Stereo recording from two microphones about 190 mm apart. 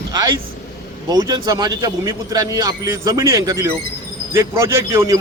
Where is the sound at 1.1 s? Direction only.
20° right (ahead or behind).